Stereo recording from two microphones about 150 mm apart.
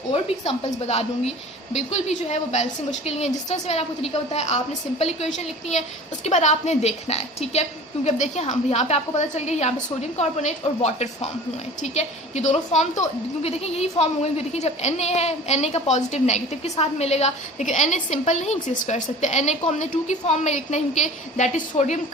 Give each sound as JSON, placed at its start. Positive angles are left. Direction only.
{"t": 0.1, "sound": "a woman's voice", "side_deg": 40}